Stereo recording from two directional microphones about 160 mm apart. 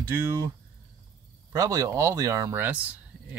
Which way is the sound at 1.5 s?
20° right (ahead or behind).